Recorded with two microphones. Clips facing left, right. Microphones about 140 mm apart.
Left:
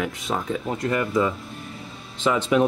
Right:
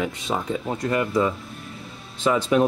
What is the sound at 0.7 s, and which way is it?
Speech, 25° right (ahead or behind).